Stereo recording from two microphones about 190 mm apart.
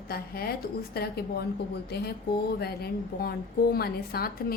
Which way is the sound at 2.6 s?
55° left (ahead or behind).